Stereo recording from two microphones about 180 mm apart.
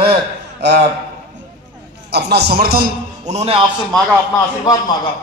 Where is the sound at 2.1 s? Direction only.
65° right (ahead or behind).